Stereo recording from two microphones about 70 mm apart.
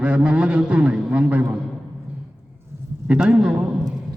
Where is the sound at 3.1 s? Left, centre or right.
Centre.